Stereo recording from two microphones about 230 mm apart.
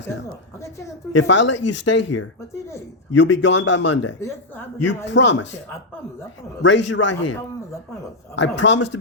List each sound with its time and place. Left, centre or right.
1.1 s speech: left
4.2 s speech: centre
5.0 s speech: left
6.6 s speech: left
8.4 s speech: left